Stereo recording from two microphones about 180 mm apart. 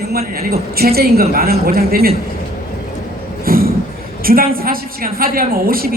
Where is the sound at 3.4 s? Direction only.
55° right (ahead or behind).